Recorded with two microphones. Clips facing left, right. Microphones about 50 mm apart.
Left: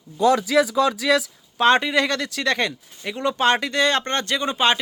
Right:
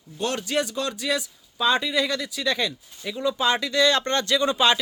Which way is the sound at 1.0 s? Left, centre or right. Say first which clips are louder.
Left 7 dB; left.